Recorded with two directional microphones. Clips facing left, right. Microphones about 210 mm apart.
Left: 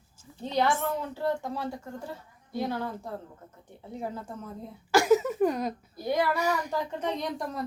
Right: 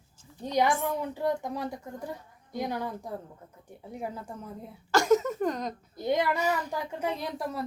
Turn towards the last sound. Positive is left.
turn(degrees=-5)  # may be behind; listen again after turning